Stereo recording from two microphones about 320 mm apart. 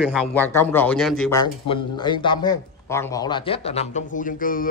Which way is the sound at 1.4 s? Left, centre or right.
Centre.